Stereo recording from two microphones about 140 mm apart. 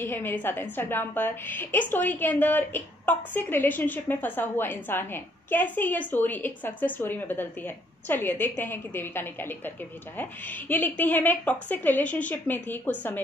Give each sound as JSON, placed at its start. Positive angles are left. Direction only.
{"t": 0.0, "sound": "a woman's voice", "side_deg": 15}